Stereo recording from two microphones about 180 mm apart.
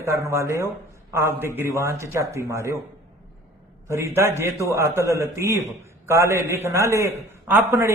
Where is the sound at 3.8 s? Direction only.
15° right (ahead or behind).